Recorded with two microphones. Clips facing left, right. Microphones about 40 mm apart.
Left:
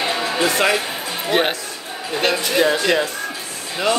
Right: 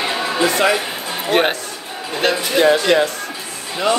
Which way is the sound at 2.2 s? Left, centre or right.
Centre.